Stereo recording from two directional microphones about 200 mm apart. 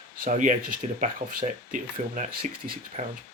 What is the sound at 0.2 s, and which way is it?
Speech, 40° right (ahead or behind).